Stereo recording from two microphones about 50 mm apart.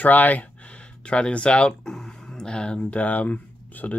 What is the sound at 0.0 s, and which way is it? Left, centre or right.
Speech, left.